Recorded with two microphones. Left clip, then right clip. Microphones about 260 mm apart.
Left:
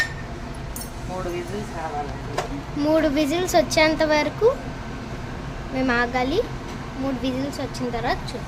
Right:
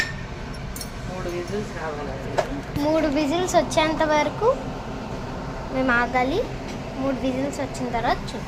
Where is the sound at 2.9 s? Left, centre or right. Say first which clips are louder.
Left 2 dB; centre.